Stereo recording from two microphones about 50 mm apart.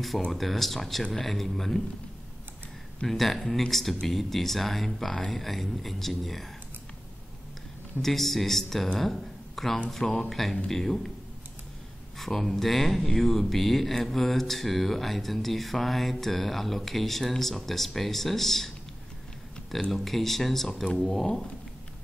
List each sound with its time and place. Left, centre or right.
0.3 s speech: centre
3.1 s speech: centre
8.0 s a man's voice: centre
12.2 s speech: centre
19.9 s speech: centre